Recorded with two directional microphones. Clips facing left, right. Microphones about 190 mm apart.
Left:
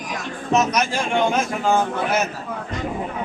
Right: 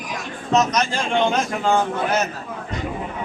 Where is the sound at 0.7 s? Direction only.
15° left (ahead or behind).